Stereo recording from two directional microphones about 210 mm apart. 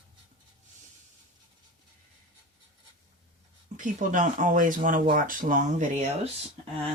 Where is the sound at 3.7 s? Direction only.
35° right (ahead or behind).